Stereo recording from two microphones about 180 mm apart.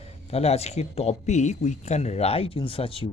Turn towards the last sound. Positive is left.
turn(degrees=30)  # may be behind; listen again after turning